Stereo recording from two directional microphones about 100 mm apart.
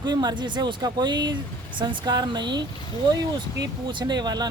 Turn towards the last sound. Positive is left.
turn(degrees=-45)  # may be behind; listen again after turning